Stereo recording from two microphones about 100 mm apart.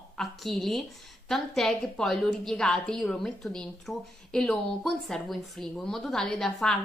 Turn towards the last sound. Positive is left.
turn(degrees=5)  # may be behind; listen again after turning